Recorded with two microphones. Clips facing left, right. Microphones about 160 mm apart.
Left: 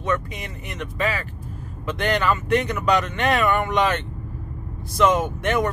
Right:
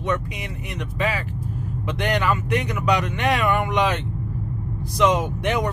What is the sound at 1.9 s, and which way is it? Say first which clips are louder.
Speech: left 1 dB; 10° right (ahead or behind).